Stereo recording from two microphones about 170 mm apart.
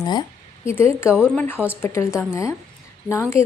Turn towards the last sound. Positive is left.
turn(degrees=15)  # may be behind; listen again after turning